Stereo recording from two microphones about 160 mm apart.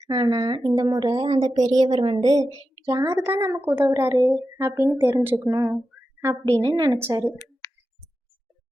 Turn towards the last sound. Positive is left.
turn(degrees=-15)  # may be behind; listen again after turning